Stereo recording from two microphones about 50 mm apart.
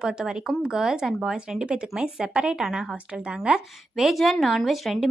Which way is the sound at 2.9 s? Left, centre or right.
Right.